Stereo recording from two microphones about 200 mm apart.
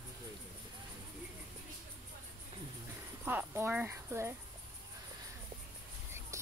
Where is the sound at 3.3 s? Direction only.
10° right (ahead or behind).